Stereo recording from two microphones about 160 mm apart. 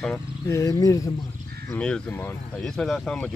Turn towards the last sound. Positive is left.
turn(degrees=5)  # may be behind; listen again after turning